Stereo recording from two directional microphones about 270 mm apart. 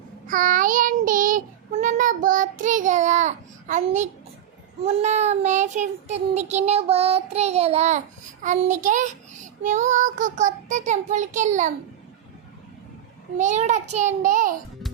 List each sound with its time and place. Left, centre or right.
0.3 s child singing: right
13.3 s child singing: right